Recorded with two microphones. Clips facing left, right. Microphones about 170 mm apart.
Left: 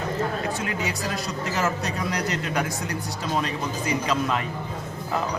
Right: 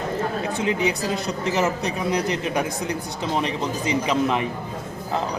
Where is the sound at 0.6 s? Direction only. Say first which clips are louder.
Right 6 dB; 20° right (ahead or behind).